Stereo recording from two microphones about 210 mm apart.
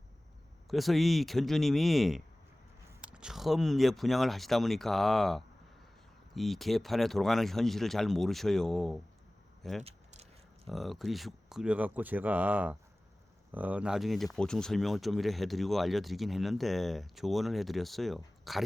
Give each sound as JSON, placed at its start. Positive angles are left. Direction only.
{"t": 0.7, "sound": "speech", "side_deg": 0}
{"t": 9.8, "sound": "a sound", "side_deg": -30}
{"t": 10.7, "sound": "speech", "side_deg": 0}